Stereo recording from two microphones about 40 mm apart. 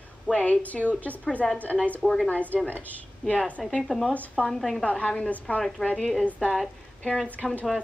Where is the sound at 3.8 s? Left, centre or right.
Centre.